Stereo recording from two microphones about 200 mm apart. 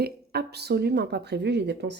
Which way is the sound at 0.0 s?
55° right (ahead or behind).